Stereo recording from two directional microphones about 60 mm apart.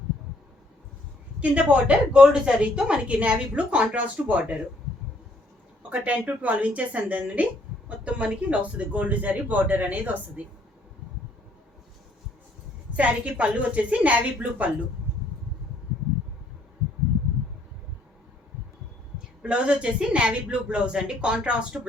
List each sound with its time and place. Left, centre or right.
1.4 s a woman's voice: right
5.9 s a woman's voice: right
13.0 s a woman's voice: right
19.4 s a woman's voice: centre